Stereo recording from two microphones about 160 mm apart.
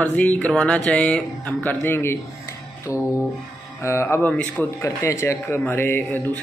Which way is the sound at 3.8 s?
15° left (ahead or behind).